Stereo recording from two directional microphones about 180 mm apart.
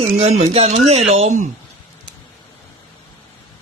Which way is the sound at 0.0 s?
35° right (ahead or behind).